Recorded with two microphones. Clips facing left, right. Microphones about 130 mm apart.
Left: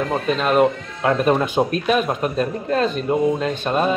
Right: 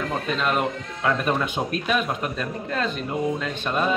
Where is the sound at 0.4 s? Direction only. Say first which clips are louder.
Left 9 dB; 35° left (ahead or behind).